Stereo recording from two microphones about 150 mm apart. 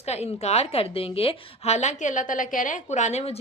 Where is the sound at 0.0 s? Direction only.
45° left (ahead or behind).